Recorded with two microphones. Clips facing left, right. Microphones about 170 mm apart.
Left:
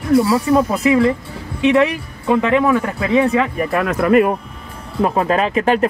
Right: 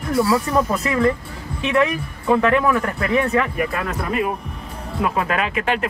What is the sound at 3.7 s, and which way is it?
Speech, 65° left (ahead or behind).